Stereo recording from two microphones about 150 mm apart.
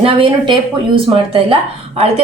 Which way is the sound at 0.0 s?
35° right (ahead or behind).